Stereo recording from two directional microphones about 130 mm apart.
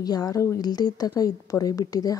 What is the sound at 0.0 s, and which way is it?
Speech, 30° left (ahead or behind).